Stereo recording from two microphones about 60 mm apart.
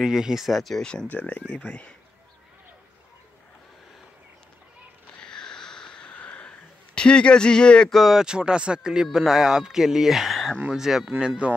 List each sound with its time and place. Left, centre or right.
0.0 s speech: centre
1.1 s speech: left
5.2 s a sound: centre
7.0 s speech: centre
7.9 s speech: centre
8.3 s speech: centre